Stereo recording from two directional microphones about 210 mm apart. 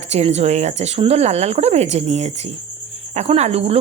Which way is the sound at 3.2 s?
30° right (ahead or behind).